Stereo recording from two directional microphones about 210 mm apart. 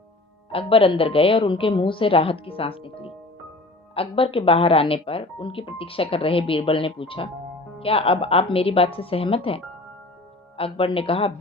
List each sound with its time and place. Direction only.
0.5 s speech: 25° left (ahead or behind)
10.6 s speech: 25° left (ahead or behind)